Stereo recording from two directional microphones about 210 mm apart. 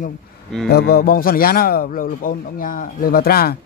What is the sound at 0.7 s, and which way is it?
Speech, 50° left (ahead or behind).